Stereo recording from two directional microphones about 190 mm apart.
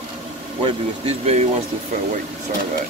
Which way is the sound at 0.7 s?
35° right (ahead or behind).